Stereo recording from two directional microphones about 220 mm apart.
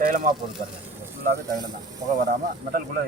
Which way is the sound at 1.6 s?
15° right (ahead or behind).